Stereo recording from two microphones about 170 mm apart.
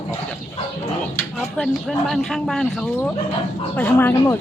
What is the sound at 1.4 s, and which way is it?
Speech, centre (ahead or behind).